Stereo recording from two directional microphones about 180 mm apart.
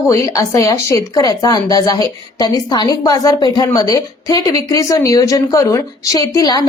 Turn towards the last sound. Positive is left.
turn(degrees=20)  # may be behind; listen again after turning